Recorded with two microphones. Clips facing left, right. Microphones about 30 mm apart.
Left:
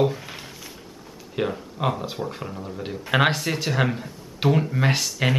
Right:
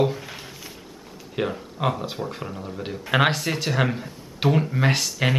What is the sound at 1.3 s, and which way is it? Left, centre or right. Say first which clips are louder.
Speech: even; centre.